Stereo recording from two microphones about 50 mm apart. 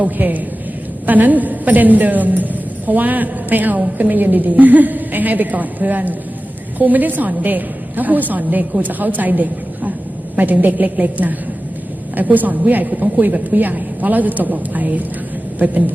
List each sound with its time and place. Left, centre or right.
0.0 s a woman's voice: right